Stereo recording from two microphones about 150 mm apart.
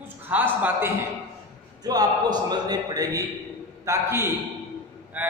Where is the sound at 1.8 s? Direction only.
25° right (ahead or behind).